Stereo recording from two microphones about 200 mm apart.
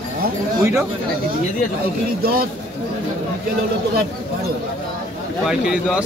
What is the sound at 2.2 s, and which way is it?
Speech, 50° right (ahead or behind).